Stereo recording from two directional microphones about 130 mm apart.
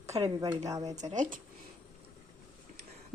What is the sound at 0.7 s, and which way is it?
Speech, 25° right (ahead or behind).